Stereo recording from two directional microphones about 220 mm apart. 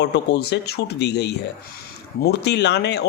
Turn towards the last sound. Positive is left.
turn(degrees=50)  # may be behind; listen again after turning